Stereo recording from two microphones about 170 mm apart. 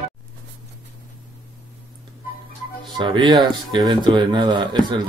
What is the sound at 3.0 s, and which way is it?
Speech, 25° right (ahead or behind).